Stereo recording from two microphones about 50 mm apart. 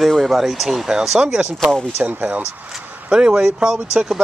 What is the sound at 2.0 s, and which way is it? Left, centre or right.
Speech, right.